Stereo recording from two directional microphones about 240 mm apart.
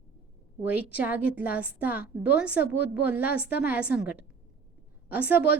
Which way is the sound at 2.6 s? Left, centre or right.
Left.